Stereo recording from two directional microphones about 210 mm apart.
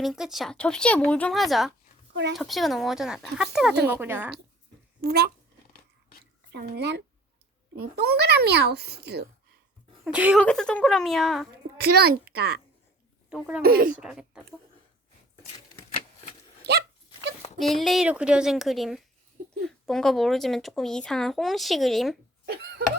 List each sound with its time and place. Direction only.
0.0 s speech: centre (ahead or behind)
4.9 s speech: 50° right (ahead or behind)
6.5 s a child's voice: 55° right (ahead or behind)
8.0 s a child's voice: 50° right (ahead or behind)
10.0 s speech: 5° right (ahead or behind)
11.8 s a child's voice: 50° right (ahead or behind)
13.6 s a child's voice: 45° right (ahead or behind)
14.0 s speech: 5° right (ahead or behind)
17.6 s speech: centre (ahead or behind)